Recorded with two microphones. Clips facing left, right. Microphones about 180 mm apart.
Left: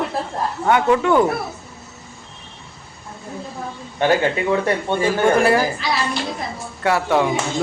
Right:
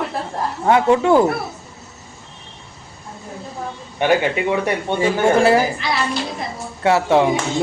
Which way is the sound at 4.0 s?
15° right (ahead or behind).